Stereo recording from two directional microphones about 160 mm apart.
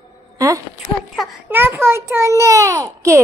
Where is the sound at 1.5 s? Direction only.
15° right (ahead or behind).